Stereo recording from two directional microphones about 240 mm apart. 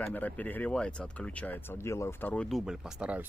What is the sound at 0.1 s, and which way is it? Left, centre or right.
Speech, centre.